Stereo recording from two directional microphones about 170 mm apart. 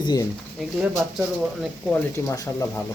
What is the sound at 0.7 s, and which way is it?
Speech, 15° right (ahead or behind).